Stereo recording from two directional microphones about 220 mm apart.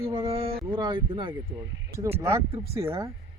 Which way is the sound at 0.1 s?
25° right (ahead or behind).